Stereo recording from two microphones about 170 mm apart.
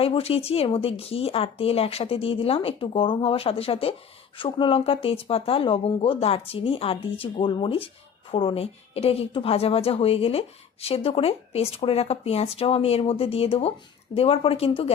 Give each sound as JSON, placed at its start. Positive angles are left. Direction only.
{"t": 0.0, "sound": "a woman's voice", "side_deg": 35}